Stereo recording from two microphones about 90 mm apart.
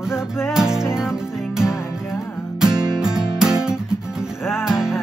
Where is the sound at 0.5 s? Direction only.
5° right (ahead or behind).